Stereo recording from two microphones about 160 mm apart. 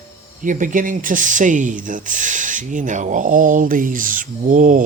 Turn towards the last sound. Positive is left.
turn(degrees=-55)  # may be behind; listen again after turning